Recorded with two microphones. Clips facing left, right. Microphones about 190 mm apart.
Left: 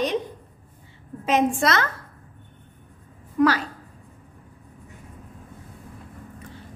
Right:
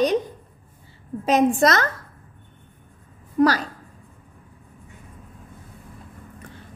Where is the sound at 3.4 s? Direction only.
35° right (ahead or behind).